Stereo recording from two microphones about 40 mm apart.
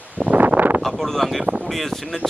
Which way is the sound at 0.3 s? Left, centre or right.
Right.